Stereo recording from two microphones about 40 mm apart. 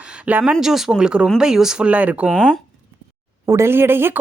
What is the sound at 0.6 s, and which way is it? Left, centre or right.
Speech, centre.